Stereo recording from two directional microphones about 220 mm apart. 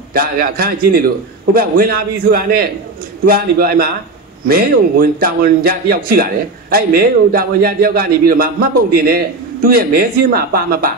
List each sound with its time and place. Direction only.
0.1 s a man's voice: 45° right (ahead or behind)